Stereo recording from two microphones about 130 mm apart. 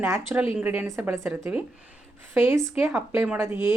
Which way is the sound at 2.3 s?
15° right (ahead or behind).